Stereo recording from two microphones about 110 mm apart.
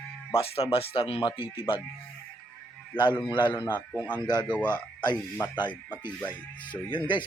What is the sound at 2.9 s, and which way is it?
Speech, 45° left (ahead or behind).